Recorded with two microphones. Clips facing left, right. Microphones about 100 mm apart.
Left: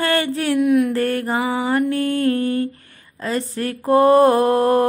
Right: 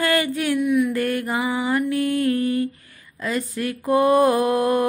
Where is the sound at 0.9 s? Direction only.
35° left (ahead or behind).